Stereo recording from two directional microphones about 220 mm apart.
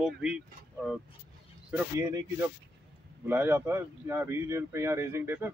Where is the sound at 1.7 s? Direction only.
10° right (ahead or behind).